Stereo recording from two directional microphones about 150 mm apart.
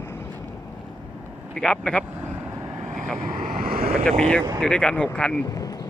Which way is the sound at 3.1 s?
65° right (ahead or behind).